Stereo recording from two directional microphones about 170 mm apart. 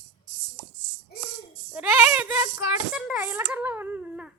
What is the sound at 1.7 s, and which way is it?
Speech, 10° right (ahead or behind).